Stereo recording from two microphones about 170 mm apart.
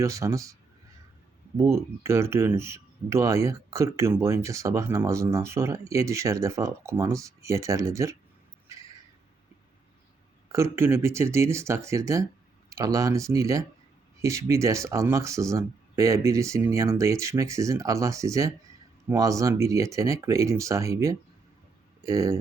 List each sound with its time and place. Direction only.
0.0 s speech: 20° right (ahead or behind)
1.5 s speech: 15° right (ahead or behind)
10.5 s speech: 15° right (ahead or behind)